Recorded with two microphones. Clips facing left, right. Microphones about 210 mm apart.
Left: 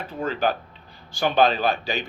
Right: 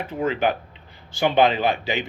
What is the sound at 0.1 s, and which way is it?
Speech, 20° right (ahead or behind).